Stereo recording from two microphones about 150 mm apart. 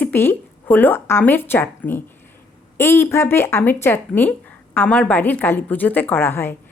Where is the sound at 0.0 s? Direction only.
15° left (ahead or behind).